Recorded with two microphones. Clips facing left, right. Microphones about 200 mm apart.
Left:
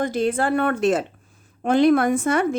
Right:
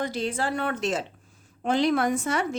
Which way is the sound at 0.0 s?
50° left (ahead or behind).